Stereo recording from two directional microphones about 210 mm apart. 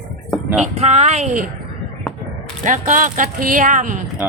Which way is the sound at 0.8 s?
30° right (ahead or behind).